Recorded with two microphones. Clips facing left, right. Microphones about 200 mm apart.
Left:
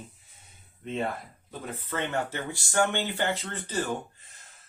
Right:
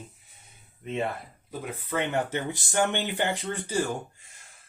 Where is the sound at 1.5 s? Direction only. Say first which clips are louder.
Right 3 dB; 15° right (ahead or behind).